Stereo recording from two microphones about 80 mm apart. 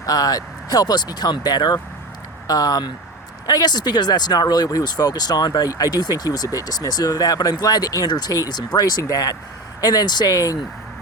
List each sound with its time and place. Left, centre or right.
0.0 s speech: left